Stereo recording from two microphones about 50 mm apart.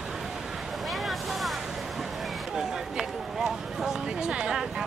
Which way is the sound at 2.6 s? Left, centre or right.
Centre.